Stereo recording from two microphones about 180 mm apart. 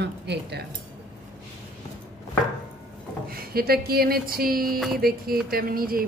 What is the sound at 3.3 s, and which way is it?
Speech, 55° right (ahead or behind).